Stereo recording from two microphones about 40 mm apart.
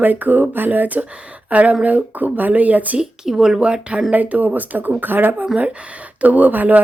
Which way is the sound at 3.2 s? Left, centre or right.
Centre.